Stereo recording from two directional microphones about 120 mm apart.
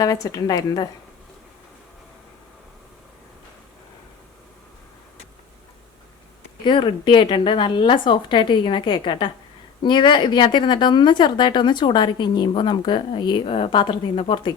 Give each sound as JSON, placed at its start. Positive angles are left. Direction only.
{"t": 0.0, "sound": "speech", "side_deg": 30}
{"t": 6.7, "sound": "a woman's voice", "side_deg": 40}